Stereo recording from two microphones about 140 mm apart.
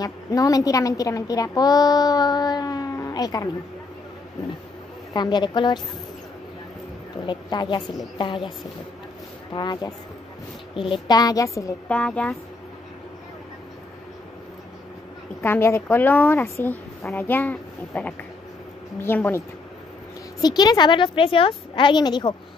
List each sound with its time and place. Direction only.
0.0 s a woman's voice: 25° left (ahead or behind)
5.1 s a woman's voice: 30° left (ahead or behind)
7.2 s a woman's voice: 30° left (ahead or behind)
10.8 s a woman's voice: 40° left (ahead or behind)
11.1 s a woman's voice: 25° left (ahead or behind)
11.9 s a woman's voice: 10° left (ahead or behind)
15.4 s a woman's voice: 20° left (ahead or behind)
20.3 s a woman's voice: 30° left (ahead or behind)